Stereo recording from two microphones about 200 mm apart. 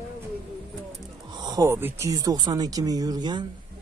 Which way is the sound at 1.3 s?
20° right (ahead or behind).